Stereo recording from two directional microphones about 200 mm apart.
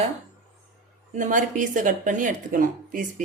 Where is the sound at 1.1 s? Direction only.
40° right (ahead or behind).